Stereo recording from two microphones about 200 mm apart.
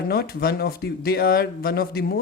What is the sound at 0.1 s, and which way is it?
Speech, 50° left (ahead or behind).